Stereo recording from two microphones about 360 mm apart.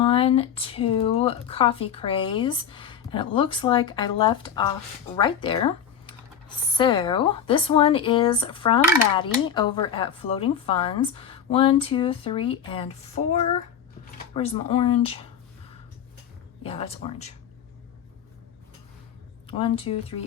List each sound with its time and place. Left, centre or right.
0.0 s speech: centre
14.3 s speech: centre
16.6 s speech: centre
19.5 s speech: centre